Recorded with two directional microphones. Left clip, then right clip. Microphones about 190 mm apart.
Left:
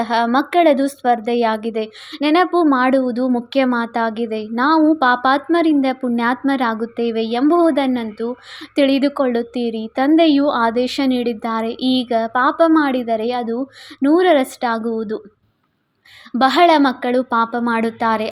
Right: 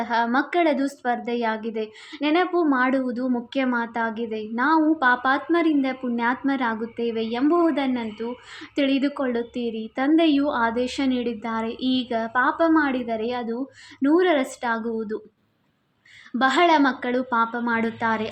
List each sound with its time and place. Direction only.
0.0 s a woman's voice: 50° left (ahead or behind)
16.4 s a woman's voice: 45° left (ahead or behind)